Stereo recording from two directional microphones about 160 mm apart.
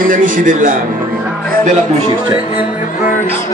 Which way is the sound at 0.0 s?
60° right (ahead or behind).